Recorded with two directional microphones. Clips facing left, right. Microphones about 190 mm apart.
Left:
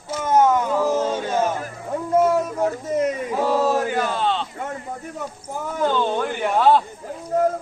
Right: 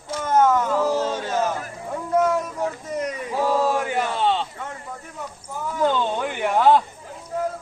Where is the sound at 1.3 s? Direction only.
30° left (ahead or behind).